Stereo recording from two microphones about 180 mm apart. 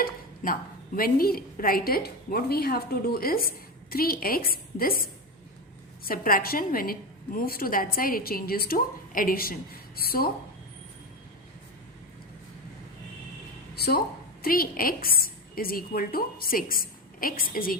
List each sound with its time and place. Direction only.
0.0 s a woman's voice: 50° left (ahead or behind)
6.1 s a woman's voice: 55° left (ahead or behind)
13.7 s a woman's voice: 60° left (ahead or behind)